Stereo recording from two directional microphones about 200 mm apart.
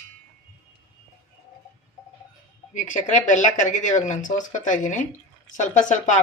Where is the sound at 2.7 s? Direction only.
40° left (ahead or behind).